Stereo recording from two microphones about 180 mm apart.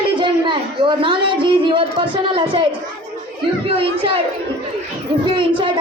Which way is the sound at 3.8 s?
30° right (ahead or behind).